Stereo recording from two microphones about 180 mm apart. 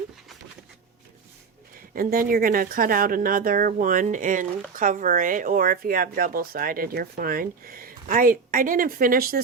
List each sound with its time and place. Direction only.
1.9 s a woman's voice: 50° right (ahead or behind)